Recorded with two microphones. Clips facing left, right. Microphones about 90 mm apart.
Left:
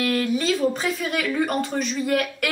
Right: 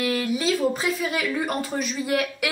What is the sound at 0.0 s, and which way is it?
A woman's voice, 5° right (ahead or behind).